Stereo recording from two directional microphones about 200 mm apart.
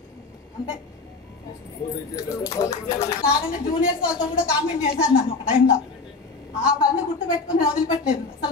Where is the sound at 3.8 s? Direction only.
5° right (ahead or behind).